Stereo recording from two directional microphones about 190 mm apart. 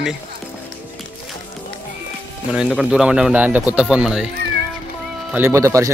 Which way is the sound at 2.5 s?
Centre (ahead or behind).